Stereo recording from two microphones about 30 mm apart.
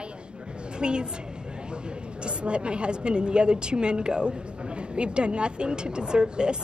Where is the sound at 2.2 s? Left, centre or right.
Right.